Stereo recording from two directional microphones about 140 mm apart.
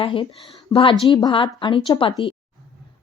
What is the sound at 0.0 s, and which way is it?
A woman's voice, 35° left (ahead or behind).